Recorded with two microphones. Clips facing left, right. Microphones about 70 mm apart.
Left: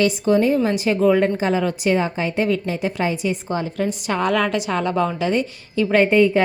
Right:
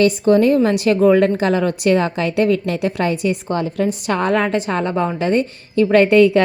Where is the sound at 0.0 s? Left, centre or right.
Right.